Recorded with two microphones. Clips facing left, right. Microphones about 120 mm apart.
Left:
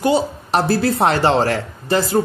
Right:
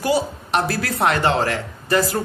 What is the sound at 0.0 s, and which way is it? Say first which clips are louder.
A woman's voice: left 3 dB; 30° left (ahead or behind).